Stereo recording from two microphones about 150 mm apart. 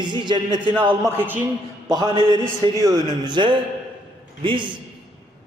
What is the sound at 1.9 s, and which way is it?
A man's voice, 30° right (ahead or behind).